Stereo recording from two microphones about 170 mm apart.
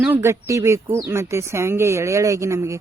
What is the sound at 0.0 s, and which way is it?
Speech, 15° right (ahead or behind).